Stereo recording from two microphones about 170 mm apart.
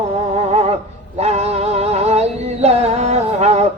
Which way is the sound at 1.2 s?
40° right (ahead or behind).